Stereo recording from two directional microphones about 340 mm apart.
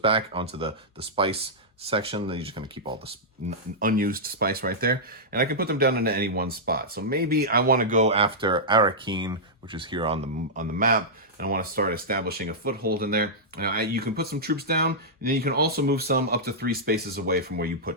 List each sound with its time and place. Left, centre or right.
0.0 s speech: centre
3.8 s speech: right